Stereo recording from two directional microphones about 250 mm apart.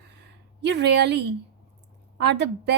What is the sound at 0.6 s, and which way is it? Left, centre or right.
A woman's voice, right.